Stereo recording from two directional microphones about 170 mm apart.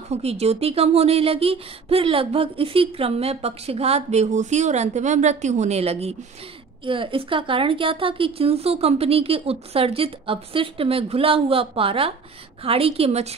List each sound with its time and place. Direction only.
0.1 s speech: 40° right (ahead or behind)